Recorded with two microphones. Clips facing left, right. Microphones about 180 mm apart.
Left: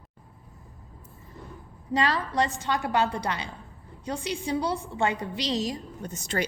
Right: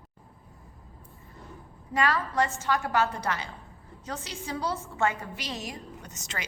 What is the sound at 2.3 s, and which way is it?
A woman's voice, 15° left (ahead or behind).